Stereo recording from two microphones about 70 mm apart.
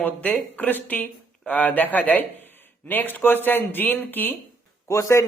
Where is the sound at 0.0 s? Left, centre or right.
Left.